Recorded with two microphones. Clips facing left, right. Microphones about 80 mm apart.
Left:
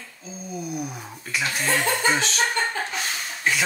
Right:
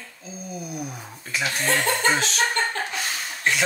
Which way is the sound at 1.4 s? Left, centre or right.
Centre.